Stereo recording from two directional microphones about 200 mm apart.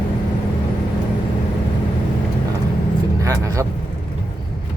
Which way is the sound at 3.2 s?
15° right (ahead or behind).